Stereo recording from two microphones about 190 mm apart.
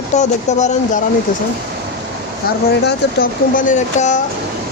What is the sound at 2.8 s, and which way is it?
Speech, 50° left (ahead or behind).